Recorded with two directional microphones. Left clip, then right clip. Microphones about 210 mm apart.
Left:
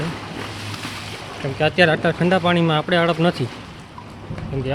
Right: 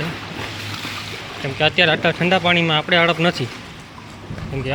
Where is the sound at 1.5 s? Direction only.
20° left (ahead or behind).